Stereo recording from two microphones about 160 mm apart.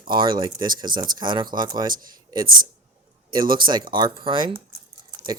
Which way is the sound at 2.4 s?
60° right (ahead or behind).